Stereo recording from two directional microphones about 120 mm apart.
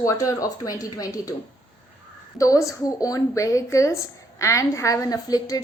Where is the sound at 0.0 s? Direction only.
30° left (ahead or behind).